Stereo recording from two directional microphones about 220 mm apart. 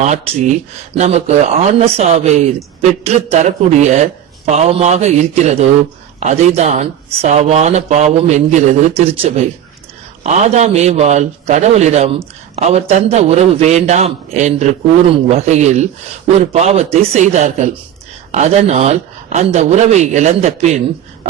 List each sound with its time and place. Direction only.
0.0 s a man's voice: 30° right (ahead or behind)